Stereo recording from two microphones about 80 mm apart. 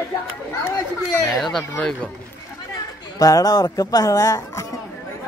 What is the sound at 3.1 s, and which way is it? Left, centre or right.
Speech, left.